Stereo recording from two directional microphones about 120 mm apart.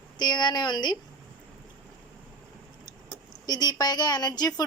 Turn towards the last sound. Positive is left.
turn(degrees=35)  # may be behind; listen again after turning